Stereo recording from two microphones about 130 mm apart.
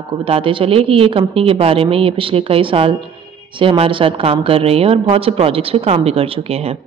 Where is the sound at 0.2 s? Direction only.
45° right (ahead or behind).